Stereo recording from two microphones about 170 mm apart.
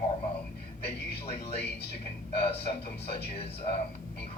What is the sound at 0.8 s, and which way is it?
Speech, 35° left (ahead or behind).